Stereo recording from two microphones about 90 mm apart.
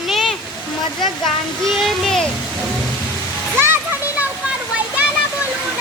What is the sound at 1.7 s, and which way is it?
Speech, 5° left (ahead or behind).